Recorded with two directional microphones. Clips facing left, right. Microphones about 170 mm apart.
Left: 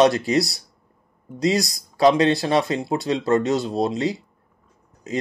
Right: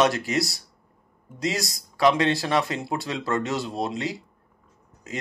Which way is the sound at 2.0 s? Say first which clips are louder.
Left 4 dB; 30° left (ahead or behind).